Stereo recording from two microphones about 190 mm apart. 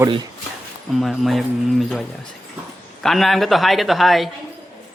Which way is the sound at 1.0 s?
Centre (ahead or behind).